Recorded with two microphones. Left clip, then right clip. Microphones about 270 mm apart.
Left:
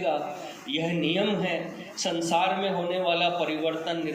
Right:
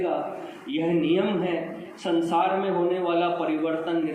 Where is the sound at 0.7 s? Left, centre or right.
Left.